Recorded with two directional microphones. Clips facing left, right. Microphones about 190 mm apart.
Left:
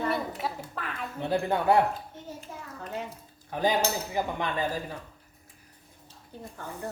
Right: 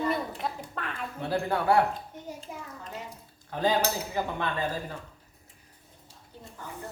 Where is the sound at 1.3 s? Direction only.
20° left (ahead or behind).